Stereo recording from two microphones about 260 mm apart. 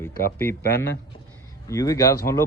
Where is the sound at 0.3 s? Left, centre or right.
Centre.